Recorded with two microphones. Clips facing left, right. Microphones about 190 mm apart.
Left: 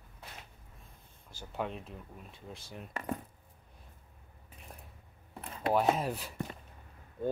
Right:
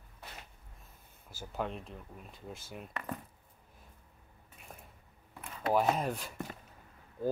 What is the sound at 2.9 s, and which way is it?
Keys jangling, 30° left (ahead or behind).